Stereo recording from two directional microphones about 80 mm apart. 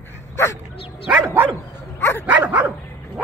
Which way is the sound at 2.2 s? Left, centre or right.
Centre.